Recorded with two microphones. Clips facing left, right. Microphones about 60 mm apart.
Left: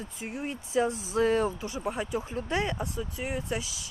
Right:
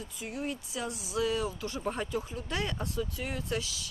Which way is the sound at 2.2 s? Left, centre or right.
Left.